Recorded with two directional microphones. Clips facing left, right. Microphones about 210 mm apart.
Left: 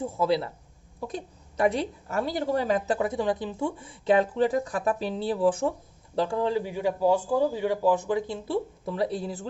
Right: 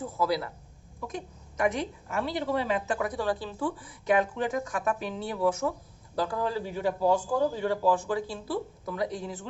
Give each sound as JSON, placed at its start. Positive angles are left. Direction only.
{"t": 0.0, "sound": "a man's voice", "side_deg": 25}
{"t": 3.1, "sound": "a man's voice", "side_deg": 20}